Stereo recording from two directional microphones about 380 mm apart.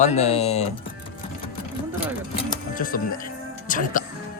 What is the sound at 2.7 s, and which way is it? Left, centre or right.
Speech, left.